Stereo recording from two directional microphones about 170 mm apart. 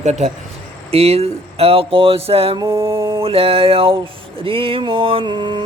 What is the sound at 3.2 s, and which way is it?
Speech, 35° right (ahead or behind).